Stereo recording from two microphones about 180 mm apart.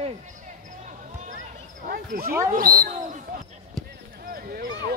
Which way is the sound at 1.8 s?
55° right (ahead or behind).